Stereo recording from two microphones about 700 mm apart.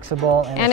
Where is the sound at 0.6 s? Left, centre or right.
Left.